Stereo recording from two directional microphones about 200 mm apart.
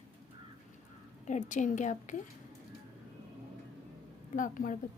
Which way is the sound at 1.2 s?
40° left (ahead or behind).